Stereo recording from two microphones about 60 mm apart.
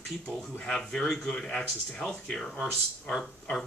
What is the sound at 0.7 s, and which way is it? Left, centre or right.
Speech, centre.